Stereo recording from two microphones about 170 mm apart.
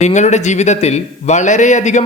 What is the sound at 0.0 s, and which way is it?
A man's voice, 45° left (ahead or behind).